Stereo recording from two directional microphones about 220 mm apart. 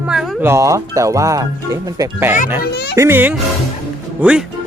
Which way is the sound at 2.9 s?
10° right (ahead or behind).